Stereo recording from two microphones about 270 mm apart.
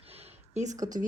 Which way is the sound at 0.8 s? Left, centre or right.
Right.